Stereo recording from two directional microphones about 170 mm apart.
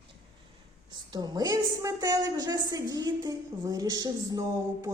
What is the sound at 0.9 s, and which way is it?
A woman's voice, 25° right (ahead or behind).